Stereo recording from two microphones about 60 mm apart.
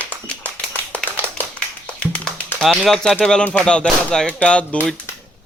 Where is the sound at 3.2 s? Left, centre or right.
Centre.